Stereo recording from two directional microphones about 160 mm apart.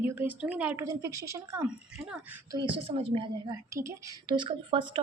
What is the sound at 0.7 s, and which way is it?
Speech, 20° right (ahead or behind).